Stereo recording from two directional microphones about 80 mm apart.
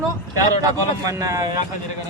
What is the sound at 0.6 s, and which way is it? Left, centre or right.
Speech, right.